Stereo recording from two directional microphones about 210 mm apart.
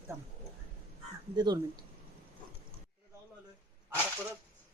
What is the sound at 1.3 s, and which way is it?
Speech, 20° right (ahead or behind).